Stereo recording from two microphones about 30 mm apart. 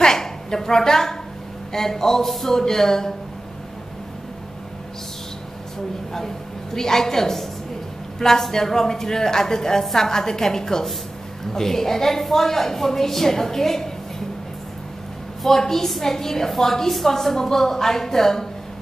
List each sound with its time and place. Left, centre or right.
0.0 s a sound: left
1.7 s a woman's voice: centre
6.1 s a woman's voice: centre
15.4 s a woman's voice: centre